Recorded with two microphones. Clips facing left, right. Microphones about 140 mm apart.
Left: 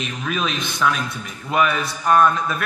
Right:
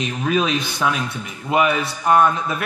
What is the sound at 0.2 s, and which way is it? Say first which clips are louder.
A man's voice: right 5 dB; 30° right (ahead or behind).